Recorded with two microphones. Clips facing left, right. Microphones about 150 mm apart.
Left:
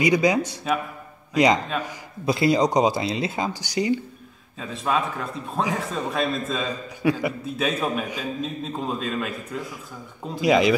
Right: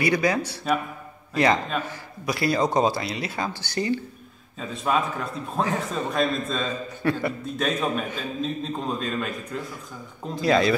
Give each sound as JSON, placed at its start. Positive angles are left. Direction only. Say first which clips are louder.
{"t": 0.0, "sound": "a man's voice", "louder": "left 3 dB", "side_deg": 15}
{"t": 4.6, "sound": "a man's voice", "louder": "even", "side_deg": 0}
{"t": 5.6, "sound": "a man's voice", "louder": "even", "side_deg": 10}